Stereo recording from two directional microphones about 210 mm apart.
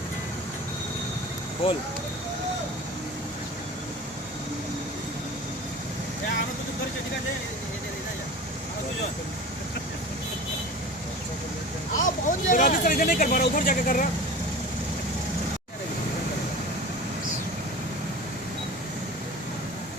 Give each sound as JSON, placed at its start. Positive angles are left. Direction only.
{"t": 1.6, "sound": "speech", "side_deg": 30}
{"t": 11.9, "sound": "vehicle", "side_deg": 40}